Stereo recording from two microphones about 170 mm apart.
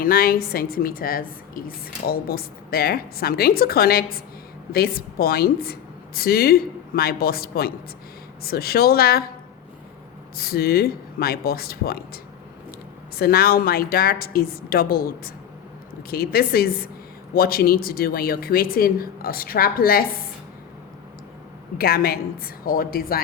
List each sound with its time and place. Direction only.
0.0 s a woman's voice: 60° left (ahead or behind)
10.3 s a woman's voice: 65° left (ahead or behind)
21.8 s a woman's voice: 60° left (ahead or behind)